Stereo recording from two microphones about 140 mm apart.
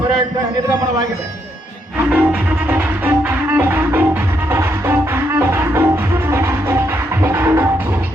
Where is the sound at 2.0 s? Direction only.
10° right (ahead or behind).